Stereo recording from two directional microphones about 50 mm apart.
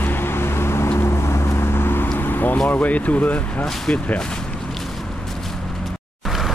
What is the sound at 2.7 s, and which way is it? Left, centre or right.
Speech, left.